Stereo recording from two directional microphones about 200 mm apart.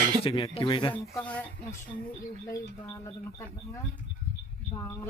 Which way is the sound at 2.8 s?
15° left (ahead or behind).